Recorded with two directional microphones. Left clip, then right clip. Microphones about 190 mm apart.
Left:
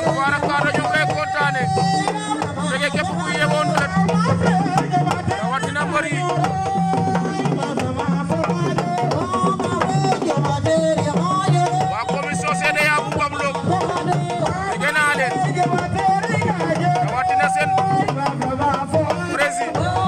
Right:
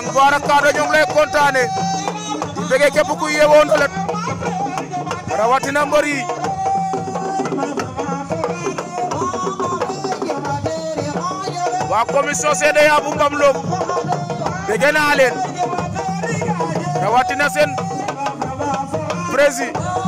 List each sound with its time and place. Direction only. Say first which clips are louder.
0.2 s speech: right 6 dB; 45° right (ahead or behind)
2.7 s a man's voice: right 10 dB; 45° right (ahead or behind)
5.4 s speech: right 7 dB; 40° right (ahead or behind)
11.9 s music: right 6 dB; 45° right (ahead or behind)
14.8 s a man's voice: right 5 dB; 45° right (ahead or behind)